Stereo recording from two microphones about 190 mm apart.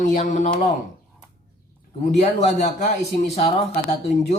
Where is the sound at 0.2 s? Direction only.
40° left (ahead or behind).